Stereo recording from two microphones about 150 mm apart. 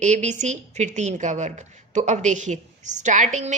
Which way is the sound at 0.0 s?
50° right (ahead or behind).